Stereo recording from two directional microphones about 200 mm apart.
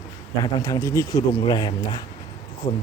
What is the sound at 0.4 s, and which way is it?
A man's voice, 20° left (ahead or behind).